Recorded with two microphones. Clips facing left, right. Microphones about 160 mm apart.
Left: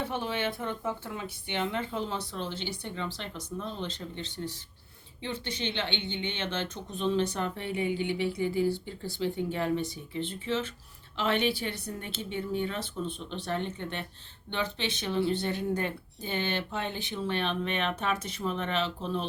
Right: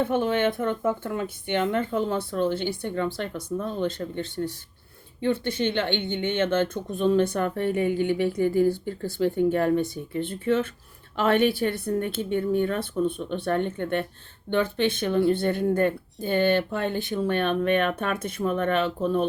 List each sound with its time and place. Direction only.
0.0 s speech: 50° right (ahead or behind)